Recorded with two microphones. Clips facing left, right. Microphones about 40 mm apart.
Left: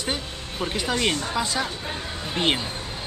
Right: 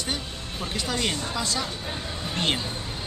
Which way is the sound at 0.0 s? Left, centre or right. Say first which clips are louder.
Left 2 dB; centre.